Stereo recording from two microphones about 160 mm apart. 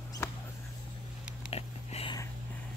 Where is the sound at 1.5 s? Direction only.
35° left (ahead or behind).